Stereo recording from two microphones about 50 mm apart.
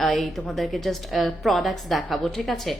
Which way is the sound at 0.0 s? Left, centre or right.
Centre.